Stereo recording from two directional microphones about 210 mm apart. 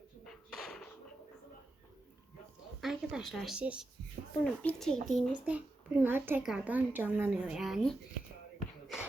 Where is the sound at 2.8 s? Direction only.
5° right (ahead or behind).